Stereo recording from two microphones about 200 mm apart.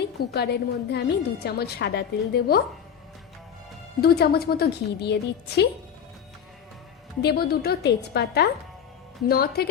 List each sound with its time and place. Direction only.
0.3 s a woman's voice: 55° left (ahead or behind)
4.0 s a woman's voice: 50° left (ahead or behind)
7.2 s a woman's voice: 50° left (ahead or behind)